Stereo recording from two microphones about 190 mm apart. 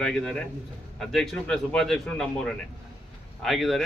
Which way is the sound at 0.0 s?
5° left (ahead or behind).